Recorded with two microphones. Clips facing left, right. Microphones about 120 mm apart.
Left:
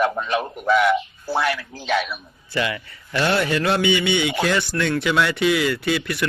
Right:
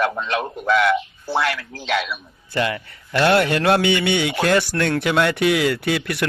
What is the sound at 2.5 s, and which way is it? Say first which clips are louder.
A man's voice: right 2 dB; 50° right (ahead or behind).